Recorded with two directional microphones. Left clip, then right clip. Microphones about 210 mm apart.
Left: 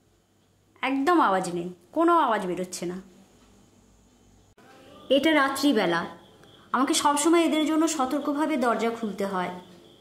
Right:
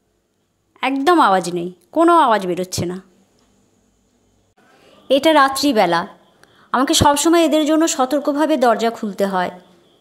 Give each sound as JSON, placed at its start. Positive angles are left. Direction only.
{"t": 0.7, "sound": "a woman's voice", "side_deg": -40}
{"t": 5.0, "sound": "a woman's voice", "side_deg": -40}